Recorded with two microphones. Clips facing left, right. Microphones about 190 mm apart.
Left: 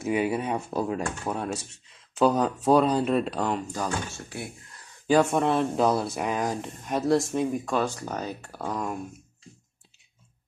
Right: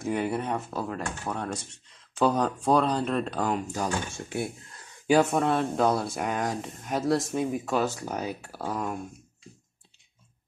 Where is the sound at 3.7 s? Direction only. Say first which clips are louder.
Even; 10° right (ahead or behind).